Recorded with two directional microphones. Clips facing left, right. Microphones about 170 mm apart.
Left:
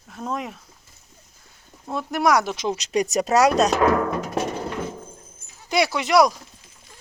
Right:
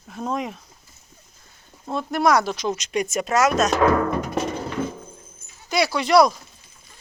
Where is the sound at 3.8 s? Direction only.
Centre (ahead or behind).